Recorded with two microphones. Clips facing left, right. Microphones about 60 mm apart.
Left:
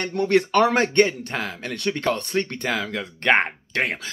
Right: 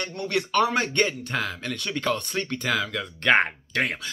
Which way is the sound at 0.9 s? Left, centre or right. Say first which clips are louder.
Left 5 dB; left.